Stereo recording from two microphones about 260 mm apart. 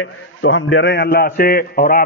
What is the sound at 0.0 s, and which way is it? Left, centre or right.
A man's voice, left.